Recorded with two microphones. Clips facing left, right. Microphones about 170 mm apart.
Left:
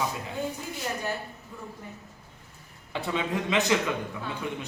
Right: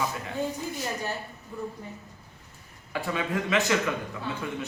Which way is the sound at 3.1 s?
20° left (ahead or behind).